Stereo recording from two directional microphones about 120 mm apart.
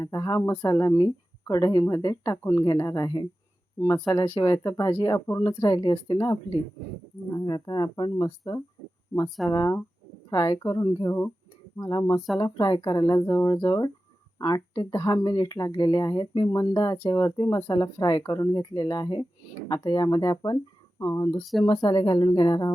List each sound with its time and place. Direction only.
0.0 s speech: 30° left (ahead or behind)
0.5 s speech: 15° left (ahead or behind)
0.8 s speech: 30° left (ahead or behind)